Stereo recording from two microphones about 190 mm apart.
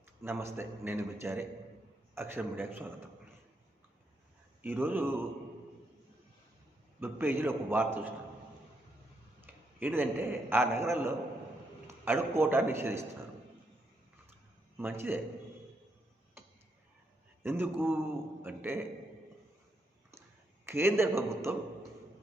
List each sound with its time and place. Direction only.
0.2 s a man's voice: 15° right (ahead or behind)
4.6 s a man's voice: 10° right (ahead or behind)
7.0 s a man's voice: 10° right (ahead or behind)
9.4 s a man's voice: 10° right (ahead or behind)
14.8 s a man's voice: 10° right (ahead or behind)
17.4 s a man's voice: 10° right (ahead or behind)
20.7 s a man's voice: 15° right (ahead or behind)